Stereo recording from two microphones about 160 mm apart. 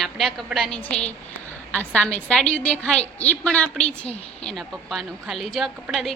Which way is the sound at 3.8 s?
40° left (ahead or behind).